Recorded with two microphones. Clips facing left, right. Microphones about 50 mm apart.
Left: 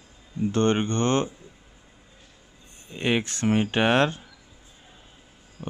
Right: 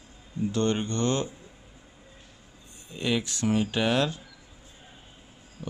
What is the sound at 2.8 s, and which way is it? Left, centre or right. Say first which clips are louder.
Speech: left 3 dB; left.